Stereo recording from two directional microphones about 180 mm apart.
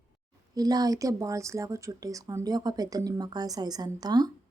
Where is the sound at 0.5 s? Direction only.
20° right (ahead or behind).